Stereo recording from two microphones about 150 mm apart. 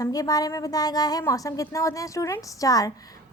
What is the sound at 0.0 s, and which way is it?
A woman's voice, 25° left (ahead or behind).